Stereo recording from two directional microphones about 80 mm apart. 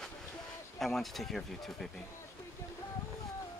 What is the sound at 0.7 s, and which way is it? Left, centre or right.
Speech, centre.